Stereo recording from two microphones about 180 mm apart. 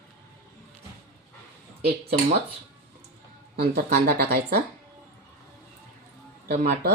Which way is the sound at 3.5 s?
60° right (ahead or behind).